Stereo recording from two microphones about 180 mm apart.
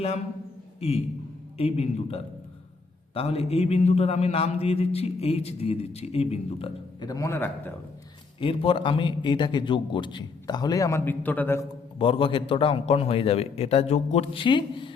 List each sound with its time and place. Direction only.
0.8 s a man's voice: 35° left (ahead or behind)
7.1 s a man's voice: 15° left (ahead or behind)
8.4 s a man's voice: 30° left (ahead or behind); by 11.6 s 10° left (ahead or behind)
11.9 s a man's voice: 30° left (ahead or behind)